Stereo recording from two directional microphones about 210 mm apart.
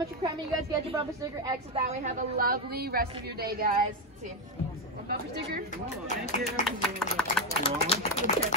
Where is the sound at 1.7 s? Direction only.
30° right (ahead or behind).